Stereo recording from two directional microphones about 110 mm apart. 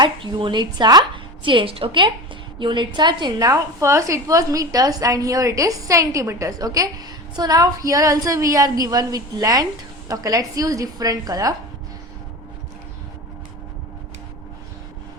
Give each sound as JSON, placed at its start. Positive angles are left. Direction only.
{"t": 0.0, "sound": "a woman's voice", "side_deg": -50}